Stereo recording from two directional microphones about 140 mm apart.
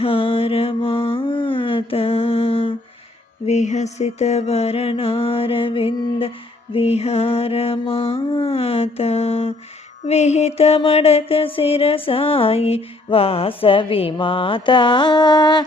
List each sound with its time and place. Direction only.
0.0 s mantra: 40° left (ahead or behind)
3.4 s mantra: 55° left (ahead or behind)
10.0 s music: 55° left (ahead or behind); by 15.6 s 30° left (ahead or behind)